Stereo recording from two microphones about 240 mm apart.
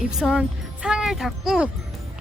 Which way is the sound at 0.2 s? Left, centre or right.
Centre.